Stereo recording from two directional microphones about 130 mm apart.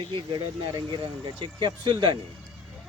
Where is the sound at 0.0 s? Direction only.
35° right (ahead or behind).